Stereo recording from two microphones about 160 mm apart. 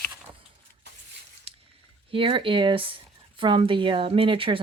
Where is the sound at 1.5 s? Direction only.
35° right (ahead or behind).